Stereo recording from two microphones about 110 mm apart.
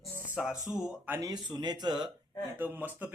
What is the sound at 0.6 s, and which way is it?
Speech, 30° left (ahead or behind).